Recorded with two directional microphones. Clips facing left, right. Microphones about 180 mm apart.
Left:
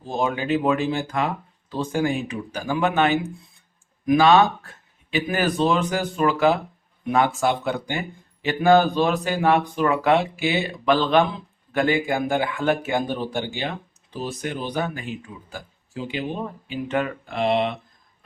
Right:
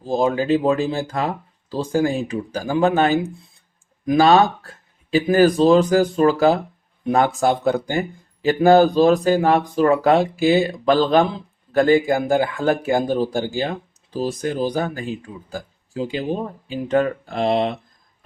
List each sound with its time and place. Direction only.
0.0 s speech: 35° right (ahead or behind)